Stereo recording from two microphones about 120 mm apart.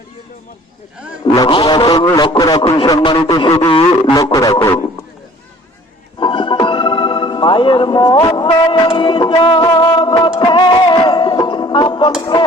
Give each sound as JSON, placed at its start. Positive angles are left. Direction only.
{"t": 1.2, "sound": "a man's voice", "side_deg": 45}
{"t": 3.5, "sound": "speech", "side_deg": 50}
{"t": 4.4, "sound": "a man's voice", "side_deg": 30}
{"t": 6.1, "sound": "music", "side_deg": 40}
{"t": 12.2, "sound": "a man's voice", "side_deg": 40}